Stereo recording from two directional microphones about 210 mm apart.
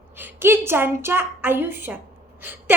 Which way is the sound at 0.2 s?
10° right (ahead or behind).